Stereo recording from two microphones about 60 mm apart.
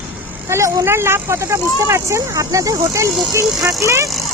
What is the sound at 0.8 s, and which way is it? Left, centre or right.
Speech, right.